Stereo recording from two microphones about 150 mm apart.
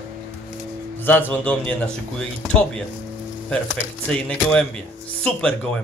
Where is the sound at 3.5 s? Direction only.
5° left (ahead or behind).